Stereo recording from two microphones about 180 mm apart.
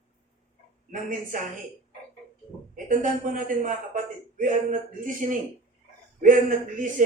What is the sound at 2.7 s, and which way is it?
A man's voice, 45° right (ahead or behind).